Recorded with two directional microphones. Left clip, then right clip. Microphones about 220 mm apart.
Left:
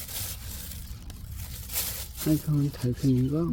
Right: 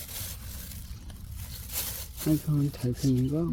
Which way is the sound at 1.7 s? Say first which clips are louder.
Left 3 dB; 15° left (ahead or behind).